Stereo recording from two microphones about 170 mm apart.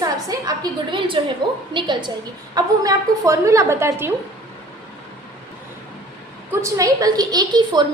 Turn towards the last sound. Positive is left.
turn(degrees=-25)  # may be behind; listen again after turning